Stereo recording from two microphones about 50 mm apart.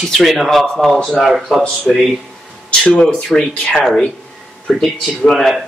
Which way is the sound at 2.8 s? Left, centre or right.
Centre.